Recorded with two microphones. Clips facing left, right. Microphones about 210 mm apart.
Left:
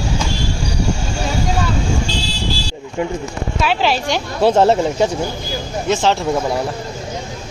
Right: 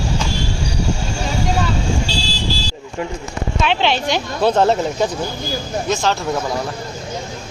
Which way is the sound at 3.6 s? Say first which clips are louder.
Left 1 dB; 5° left (ahead or behind).